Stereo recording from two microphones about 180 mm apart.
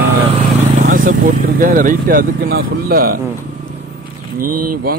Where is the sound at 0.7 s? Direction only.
50° right (ahead or behind).